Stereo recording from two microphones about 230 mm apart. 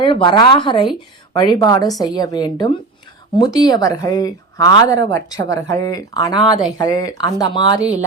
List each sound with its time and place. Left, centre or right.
0.0 s speech: left